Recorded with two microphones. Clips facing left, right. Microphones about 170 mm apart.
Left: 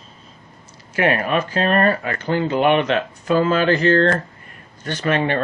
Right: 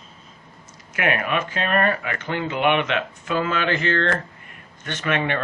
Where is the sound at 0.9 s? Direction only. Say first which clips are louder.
Left 4 dB; 30° left (ahead or behind).